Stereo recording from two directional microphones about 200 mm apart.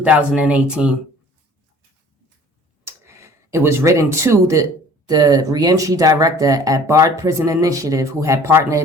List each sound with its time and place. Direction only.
0.0 s speech: 5° right (ahead or behind)
2.8 s a sound: 15° right (ahead or behind)
5.0 s speech: 20° right (ahead or behind)